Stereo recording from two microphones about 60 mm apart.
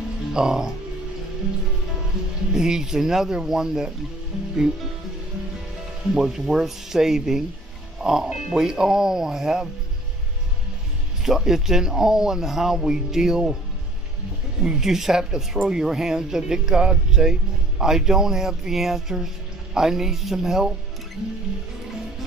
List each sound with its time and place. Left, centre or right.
0.3 s speech: centre
2.5 s speech: centre
6.1 s speech: centre
11.2 s speech: centre
14.6 s speech: centre